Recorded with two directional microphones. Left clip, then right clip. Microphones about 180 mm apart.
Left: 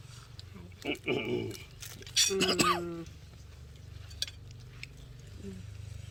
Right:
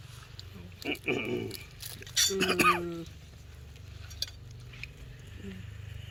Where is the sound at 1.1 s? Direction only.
55° left (ahead or behind).